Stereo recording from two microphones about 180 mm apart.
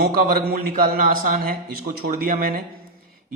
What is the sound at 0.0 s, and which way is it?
Speech, 55° right (ahead or behind).